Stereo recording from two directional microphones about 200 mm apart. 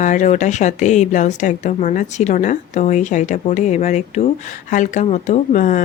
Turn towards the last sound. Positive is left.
turn(degrees=40)  # may be behind; listen again after turning